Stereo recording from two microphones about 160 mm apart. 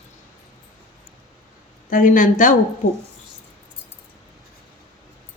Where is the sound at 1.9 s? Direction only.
60° left (ahead or behind).